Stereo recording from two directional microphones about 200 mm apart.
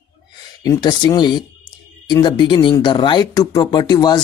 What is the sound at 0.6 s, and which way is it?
Speech, 20° left (ahead or behind).